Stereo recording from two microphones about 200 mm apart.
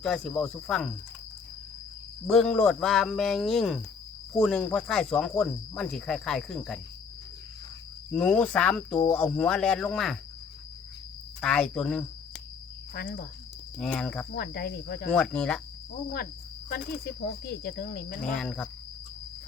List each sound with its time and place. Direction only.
0.0 s speech: 5° left (ahead or behind)
2.2 s speech: 5° left (ahead or behind)
8.1 s speech: 5° left (ahead or behind)
11.3 s speech: 5° left (ahead or behind)
12.9 s speech: 50° left (ahead or behind)
13.7 s speech: 5° left (ahead or behind)
14.3 s speech: 50° left (ahead or behind)
15.1 s speech: 5° left (ahead or behind)
16.6 s speech: 50° left (ahead or behind)
18.3 s speech: 5° left (ahead or behind)